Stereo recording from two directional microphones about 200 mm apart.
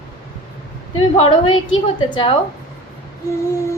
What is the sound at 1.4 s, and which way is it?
Speech, 90° left.